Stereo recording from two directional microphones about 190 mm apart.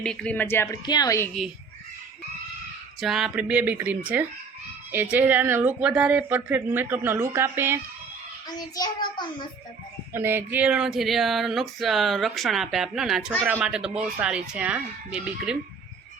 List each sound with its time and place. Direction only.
0.0 s a woman's voice: 5° left (ahead or behind)
3.0 s speech: centre (ahead or behind)
8.4 s child singing: 20° left (ahead or behind)
10.1 s a sound: 10° right (ahead or behind)